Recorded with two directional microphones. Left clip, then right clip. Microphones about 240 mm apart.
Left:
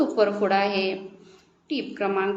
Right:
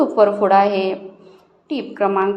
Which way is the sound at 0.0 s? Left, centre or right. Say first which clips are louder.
Right 7 dB; centre.